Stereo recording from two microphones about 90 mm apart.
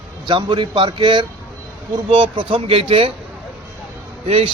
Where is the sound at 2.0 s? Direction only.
80° right.